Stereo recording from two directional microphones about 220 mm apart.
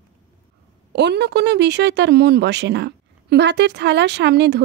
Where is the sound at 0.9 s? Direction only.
50° right (ahead or behind).